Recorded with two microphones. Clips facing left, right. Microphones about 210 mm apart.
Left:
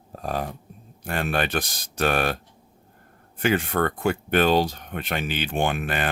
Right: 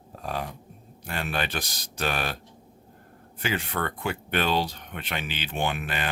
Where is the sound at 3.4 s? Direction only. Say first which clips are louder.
Left 7 dB; 50° left (ahead or behind).